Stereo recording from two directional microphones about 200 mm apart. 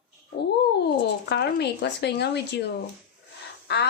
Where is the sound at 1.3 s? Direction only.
55° left (ahead or behind).